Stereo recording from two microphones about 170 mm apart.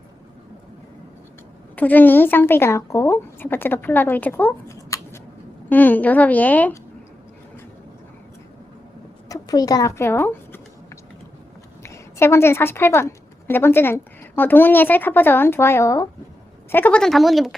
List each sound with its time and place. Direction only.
1.7 s a woman's voice: 10° left (ahead or behind)
9.3 s speech: 20° left (ahead or behind)
11.8 s a woman's voice: 15° left (ahead or behind); by 17.6 s centre (ahead or behind)